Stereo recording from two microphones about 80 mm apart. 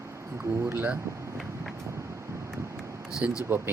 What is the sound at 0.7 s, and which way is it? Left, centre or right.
Speech, right.